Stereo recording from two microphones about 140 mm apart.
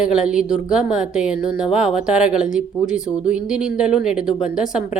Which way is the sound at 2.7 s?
25° left (ahead or behind).